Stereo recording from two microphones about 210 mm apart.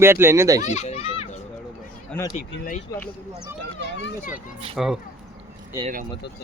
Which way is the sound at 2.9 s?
15° left (ahead or behind).